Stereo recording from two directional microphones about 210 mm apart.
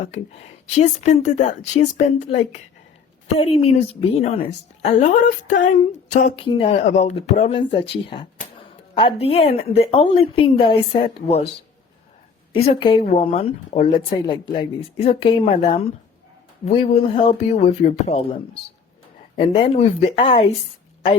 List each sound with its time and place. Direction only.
0.0 s a woman's voice: 30° left (ahead or behind)
12.5 s speech: 25° left (ahead or behind)